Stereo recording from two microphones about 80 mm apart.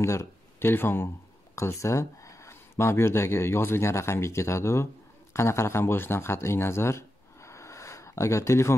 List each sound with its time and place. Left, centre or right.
0.0 s speech: left